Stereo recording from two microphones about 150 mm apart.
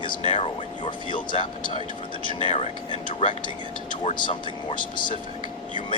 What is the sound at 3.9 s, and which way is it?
Speech, 60° left (ahead or behind).